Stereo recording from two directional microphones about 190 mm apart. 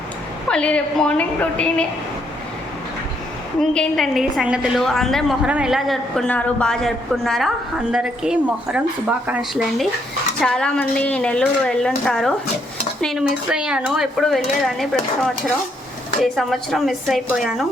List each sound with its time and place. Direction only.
0.4 s a woman's voice: 5° left (ahead or behind)
3.6 s a woman's voice: centre (ahead or behind)